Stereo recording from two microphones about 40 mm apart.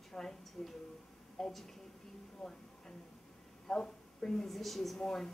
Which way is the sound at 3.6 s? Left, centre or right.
Centre.